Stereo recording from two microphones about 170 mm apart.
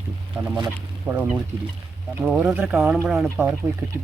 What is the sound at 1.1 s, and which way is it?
Speech, 20° right (ahead or behind).